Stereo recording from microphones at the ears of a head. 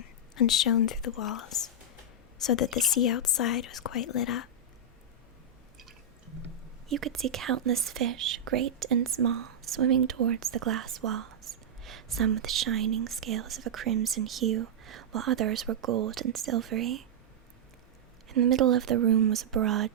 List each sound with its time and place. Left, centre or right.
0.0 s speech: left
6.8 s speech: right
18.3 s speech: right